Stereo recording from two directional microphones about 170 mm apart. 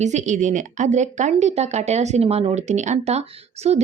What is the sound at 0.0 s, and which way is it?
A woman's voice, 45° right (ahead or behind).